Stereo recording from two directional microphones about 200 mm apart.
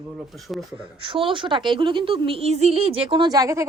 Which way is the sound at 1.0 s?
25° right (ahead or behind).